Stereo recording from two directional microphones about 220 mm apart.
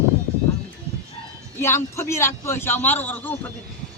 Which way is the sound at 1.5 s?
10° left (ahead or behind).